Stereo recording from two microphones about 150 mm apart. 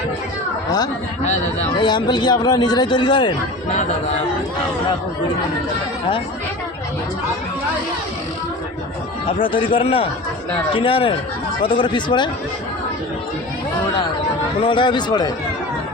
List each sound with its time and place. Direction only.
1.2 s speech: 50° left (ahead or behind)
1.7 s speech: 30° left (ahead or behind)
9.7 s speech: 40° left (ahead or behind)
14.6 s speech: 35° left (ahead or behind)